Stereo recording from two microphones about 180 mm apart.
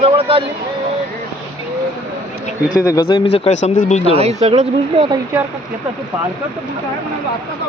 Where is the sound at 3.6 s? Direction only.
40° left (ahead or behind).